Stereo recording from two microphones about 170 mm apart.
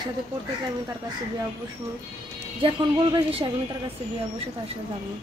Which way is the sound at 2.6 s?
30° right (ahead or behind).